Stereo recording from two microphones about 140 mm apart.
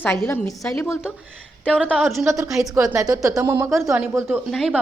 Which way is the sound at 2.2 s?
20° right (ahead or behind).